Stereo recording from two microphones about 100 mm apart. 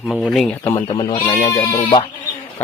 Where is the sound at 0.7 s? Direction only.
50° left (ahead or behind).